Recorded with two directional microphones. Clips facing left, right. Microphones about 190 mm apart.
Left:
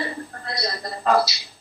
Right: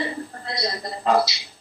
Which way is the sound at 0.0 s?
15° right (ahead or behind).